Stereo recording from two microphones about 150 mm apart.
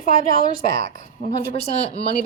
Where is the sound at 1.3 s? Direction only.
50° left (ahead or behind).